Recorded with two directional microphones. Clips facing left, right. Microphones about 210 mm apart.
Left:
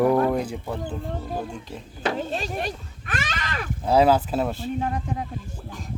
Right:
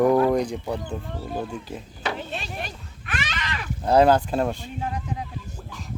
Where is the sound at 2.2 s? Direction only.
40° left (ahead or behind).